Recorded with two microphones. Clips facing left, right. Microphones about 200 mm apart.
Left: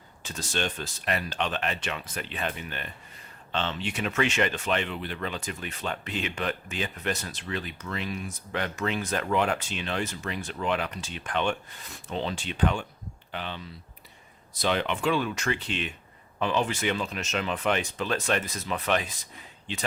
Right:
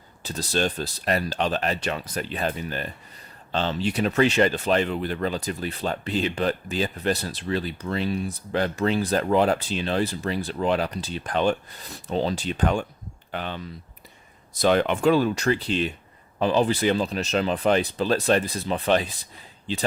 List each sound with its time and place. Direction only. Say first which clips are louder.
0.2 s speech: right 6 dB; 35° right (ahead or behind)